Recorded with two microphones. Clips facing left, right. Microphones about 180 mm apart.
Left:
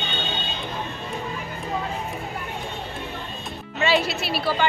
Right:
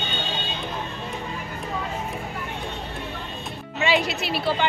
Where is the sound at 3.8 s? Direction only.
15° right (ahead or behind).